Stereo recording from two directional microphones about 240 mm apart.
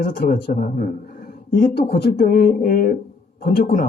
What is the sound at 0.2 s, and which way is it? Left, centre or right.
A man's voice, left.